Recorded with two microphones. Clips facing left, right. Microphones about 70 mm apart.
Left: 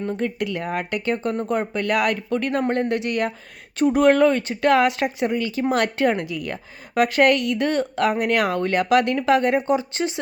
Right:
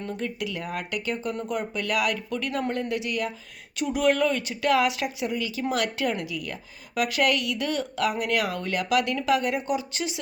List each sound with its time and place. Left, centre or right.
0.2 s speech: left